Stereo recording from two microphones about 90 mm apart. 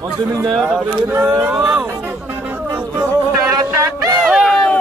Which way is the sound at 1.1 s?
30° right (ahead or behind).